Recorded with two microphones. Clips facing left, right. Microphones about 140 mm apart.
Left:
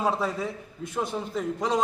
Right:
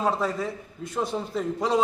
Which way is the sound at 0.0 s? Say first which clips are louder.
Right 1 dB; centre (ahead or behind).